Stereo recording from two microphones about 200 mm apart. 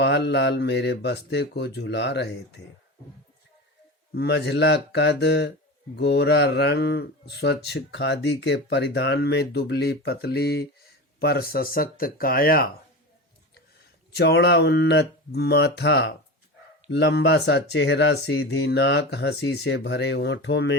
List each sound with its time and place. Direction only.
0.0 s speech: 60° left (ahead or behind)
4.1 s speech: 55° left (ahead or behind)
14.2 s speech: 55° left (ahead or behind)